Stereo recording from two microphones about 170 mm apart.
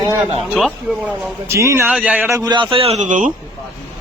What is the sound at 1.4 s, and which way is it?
Speech, 15° right (ahead or behind).